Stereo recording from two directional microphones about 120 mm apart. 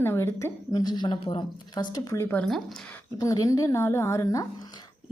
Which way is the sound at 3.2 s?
30° left (ahead or behind).